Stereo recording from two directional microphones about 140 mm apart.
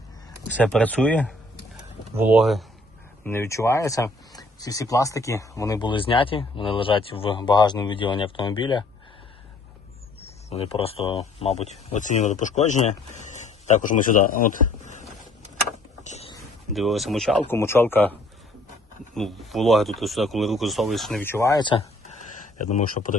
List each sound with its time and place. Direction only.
0.5 s speech: 10° left (ahead or behind)
3.2 s speech: 20° left (ahead or behind)
5.9 s speech: 40° left (ahead or behind)
10.2 s speech: 45° left (ahead or behind); by 14.6 s 75° left (ahead or behind)
14.6 s a sound: 60° right (ahead or behind)
16.7 s speech: centre (ahead or behind)
17.5 s speech: 15° left (ahead or behind)
19.1 s speech: centre (ahead or behind)
21.2 s speech: 15° left (ahead or behind)
21.6 s speech: 35° left (ahead or behind)
22.5 s speech: 60° left (ahead or behind)